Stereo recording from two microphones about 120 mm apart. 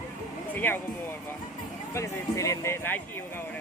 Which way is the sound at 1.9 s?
25° left (ahead or behind).